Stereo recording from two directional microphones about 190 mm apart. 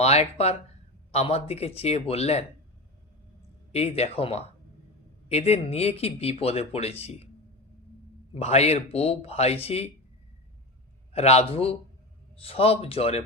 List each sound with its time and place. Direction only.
0.0 s speech: 35° left (ahead or behind)
3.7 s speech: 35° left (ahead or behind)
8.4 s speech: 35° left (ahead or behind)
11.1 s speech: 35° left (ahead or behind)